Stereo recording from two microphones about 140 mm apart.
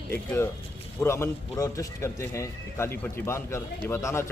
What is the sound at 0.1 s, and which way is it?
A man's voice, 15° left (ahead or behind).